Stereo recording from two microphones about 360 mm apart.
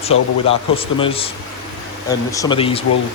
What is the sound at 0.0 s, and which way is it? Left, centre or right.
A man's voice, centre.